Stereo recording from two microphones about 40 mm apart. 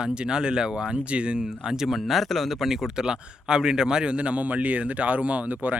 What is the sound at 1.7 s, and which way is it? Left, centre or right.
Speech, centre.